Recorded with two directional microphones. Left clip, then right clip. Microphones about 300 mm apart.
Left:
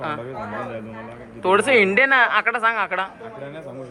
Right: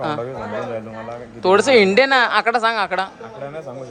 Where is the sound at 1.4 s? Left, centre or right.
Centre.